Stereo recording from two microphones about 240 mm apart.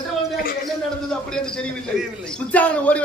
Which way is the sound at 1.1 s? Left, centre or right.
Centre.